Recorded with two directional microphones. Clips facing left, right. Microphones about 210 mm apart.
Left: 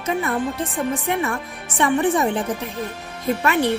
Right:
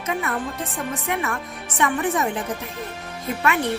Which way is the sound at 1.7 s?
30° left (ahead or behind).